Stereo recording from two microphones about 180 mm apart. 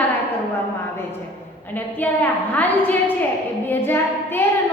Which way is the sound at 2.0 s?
10° left (ahead or behind).